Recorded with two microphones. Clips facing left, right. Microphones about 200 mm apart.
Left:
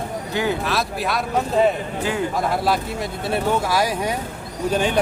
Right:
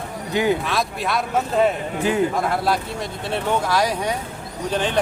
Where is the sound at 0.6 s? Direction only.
Centre (ahead or behind).